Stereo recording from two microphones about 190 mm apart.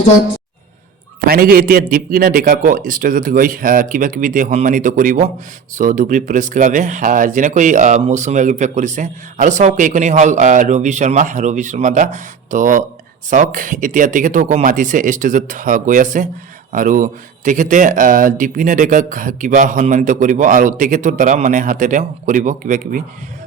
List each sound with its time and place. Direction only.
1.2 s speech: 50° right (ahead or behind)